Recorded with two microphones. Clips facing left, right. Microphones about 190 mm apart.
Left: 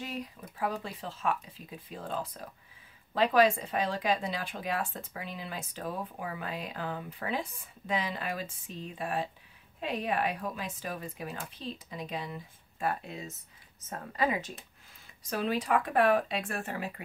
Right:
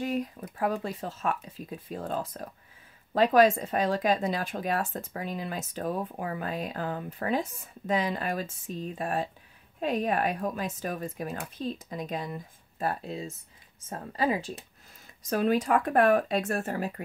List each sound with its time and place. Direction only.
0.0 s speech: 50° right (ahead or behind); by 14.5 s 30° right (ahead or behind)
15.2 s speech: 45° right (ahead or behind)